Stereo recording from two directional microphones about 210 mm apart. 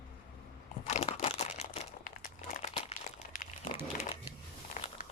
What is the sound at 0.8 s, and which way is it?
Crumpling, 35° left (ahead or behind).